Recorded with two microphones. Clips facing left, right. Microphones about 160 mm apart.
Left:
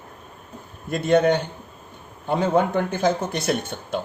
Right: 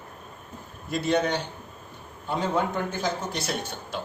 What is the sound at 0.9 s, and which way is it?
A man's voice, 55° left (ahead or behind).